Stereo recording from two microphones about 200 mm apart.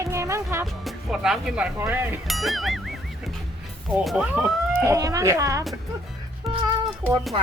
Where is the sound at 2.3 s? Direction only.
Centre (ahead or behind).